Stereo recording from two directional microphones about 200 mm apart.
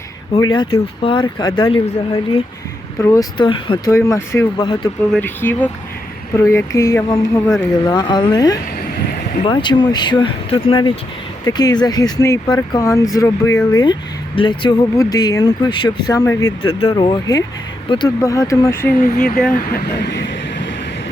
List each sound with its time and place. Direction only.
0.5 s speech: 25° left (ahead or behind)
3.0 s speech: 15° left (ahead or behind)
3.9 s speech: 15° left (ahead or behind)
5.1 s speech: 10° left (ahead or behind)
19.7 s speech: 55° left (ahead or behind)